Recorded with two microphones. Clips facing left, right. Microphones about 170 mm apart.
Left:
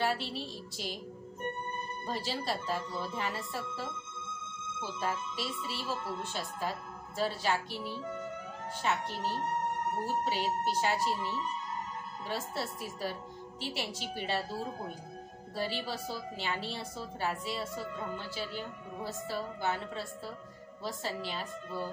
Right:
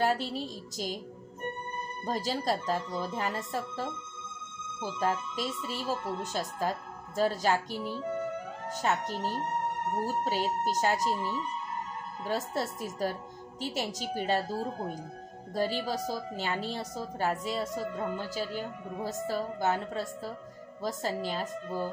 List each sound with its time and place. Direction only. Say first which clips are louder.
0.0 s a woman's voice: right 4 dB; 45° right (ahead or behind)
2.0 s a woman's voice: right 5 dB; 45° right (ahead or behind)